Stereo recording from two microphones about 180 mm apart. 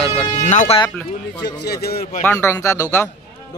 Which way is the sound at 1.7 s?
60° left (ahead or behind).